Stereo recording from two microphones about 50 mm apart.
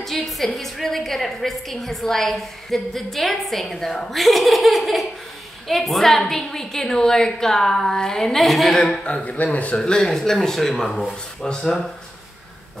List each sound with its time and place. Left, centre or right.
0.0 s a woman's voice: centre
9.0 s a man's voice: left
9.8 s a woman's voice: centre